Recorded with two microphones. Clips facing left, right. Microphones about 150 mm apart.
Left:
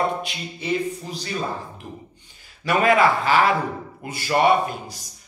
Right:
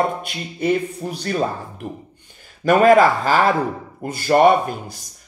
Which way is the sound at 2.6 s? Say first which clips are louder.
Right 6 dB; 45° right (ahead or behind).